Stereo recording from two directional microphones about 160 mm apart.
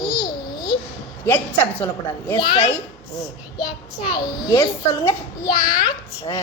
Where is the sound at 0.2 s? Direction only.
25° left (ahead or behind).